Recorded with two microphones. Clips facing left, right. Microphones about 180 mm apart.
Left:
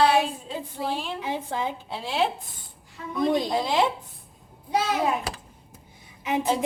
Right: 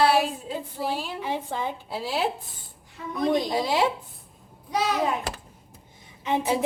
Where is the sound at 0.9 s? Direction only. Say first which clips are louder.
Even; 5° right (ahead or behind).